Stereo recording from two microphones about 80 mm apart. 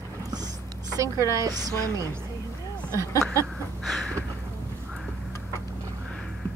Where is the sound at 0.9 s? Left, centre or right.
Right.